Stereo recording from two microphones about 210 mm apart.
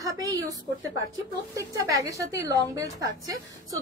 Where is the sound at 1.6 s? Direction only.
15° right (ahead or behind).